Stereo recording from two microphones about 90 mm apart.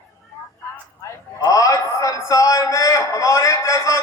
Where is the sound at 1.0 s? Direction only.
40° left (ahead or behind).